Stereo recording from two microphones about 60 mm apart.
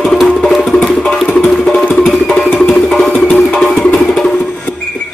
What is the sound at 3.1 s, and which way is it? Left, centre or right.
Music, left.